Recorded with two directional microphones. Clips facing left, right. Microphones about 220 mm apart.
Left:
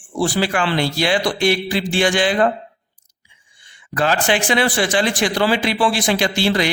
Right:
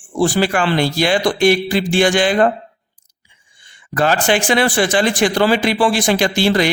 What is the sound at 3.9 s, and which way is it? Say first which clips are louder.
Speech: right 3 dB; 45° right (ahead or behind).